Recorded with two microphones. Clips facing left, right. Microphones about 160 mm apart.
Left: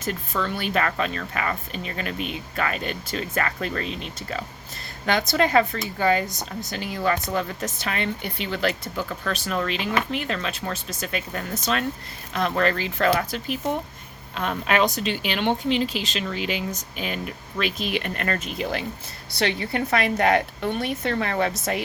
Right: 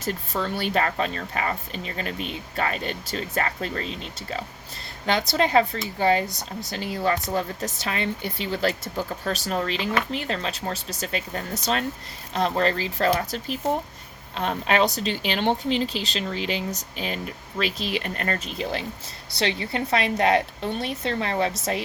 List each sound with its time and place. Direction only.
0.0 s a woman's voice: 35° right (ahead or behind)